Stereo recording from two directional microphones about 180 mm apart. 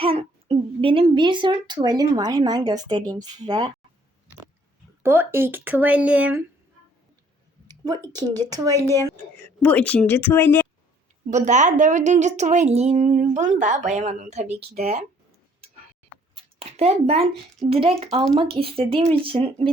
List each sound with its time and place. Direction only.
0.0 s a woman's voice: 35° right (ahead or behind)
5.0 s speech: 15° right (ahead or behind)
7.9 s speech: 20° right (ahead or behind)
9.1 s speech: 10° left (ahead or behind)
11.3 s speech: 40° right (ahead or behind)
16.3 s a sound: 35° right (ahead or behind)
17.7 s speech: 30° right (ahead or behind)